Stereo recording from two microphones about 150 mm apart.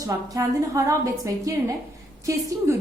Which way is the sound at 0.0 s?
20° right (ahead or behind).